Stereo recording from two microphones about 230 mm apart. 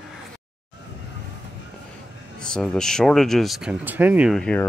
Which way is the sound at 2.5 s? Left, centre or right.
Centre.